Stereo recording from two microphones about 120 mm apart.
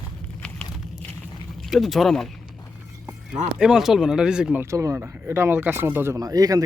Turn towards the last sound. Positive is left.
turn(degrees=-30)  # may be behind; listen again after turning